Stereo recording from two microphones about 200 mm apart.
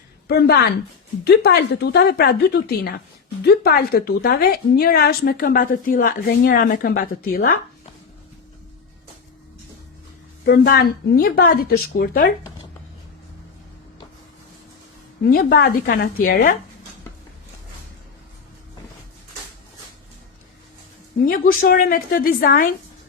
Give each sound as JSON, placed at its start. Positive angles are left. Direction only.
{"t": 0.3, "sound": "a woman's voice", "side_deg": 50}
{"t": 10.4, "sound": "a woman's voice", "side_deg": 50}
{"t": 15.2, "sound": "a woman's voice", "side_deg": 45}
{"t": 21.2, "sound": "a woman's voice", "side_deg": 45}